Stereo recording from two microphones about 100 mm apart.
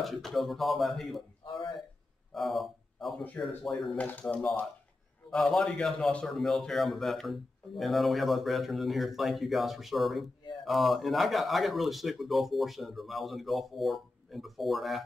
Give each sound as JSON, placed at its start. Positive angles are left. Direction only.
{"t": 0.0, "sound": "a man's voice", "side_deg": 0}
{"t": 1.4, "sound": "a sound", "side_deg": 55}
{"t": 2.3, "sound": "a man's voice", "side_deg": 0}
{"t": 4.0, "sound": "a man's voice", "side_deg": 15}